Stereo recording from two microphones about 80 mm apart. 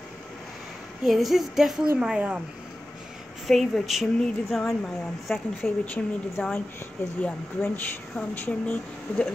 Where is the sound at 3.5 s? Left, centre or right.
Centre.